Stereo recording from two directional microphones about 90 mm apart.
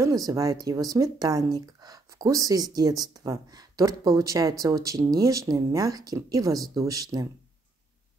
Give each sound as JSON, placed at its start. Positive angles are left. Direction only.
{"t": 0.0, "sound": "speech", "side_deg": -40}